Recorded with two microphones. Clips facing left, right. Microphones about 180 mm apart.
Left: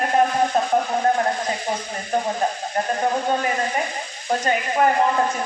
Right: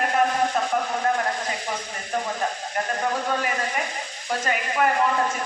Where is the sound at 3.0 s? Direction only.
30° left (ahead or behind).